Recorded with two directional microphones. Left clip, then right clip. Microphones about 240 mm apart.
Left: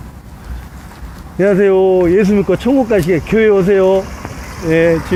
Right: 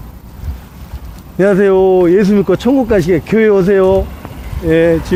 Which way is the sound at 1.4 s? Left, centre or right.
Right.